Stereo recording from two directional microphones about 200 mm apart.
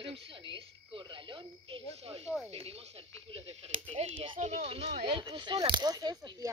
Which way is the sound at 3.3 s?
30° right (ahead or behind).